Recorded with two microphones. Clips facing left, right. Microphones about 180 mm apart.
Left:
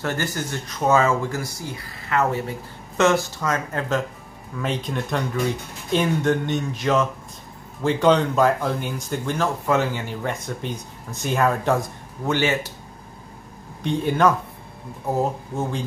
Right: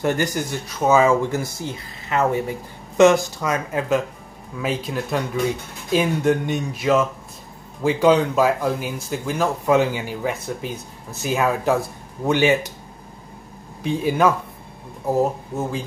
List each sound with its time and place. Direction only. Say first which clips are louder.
0.0 s speech: right 5 dB; 15° right (ahead or behind)
1.3 s speech: right 4 dB; 25° right (ahead or behind)
13.8 s speech: right 1 dB; 5° right (ahead or behind)